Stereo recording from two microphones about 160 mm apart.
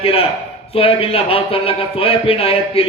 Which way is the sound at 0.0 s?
35° left (ahead or behind).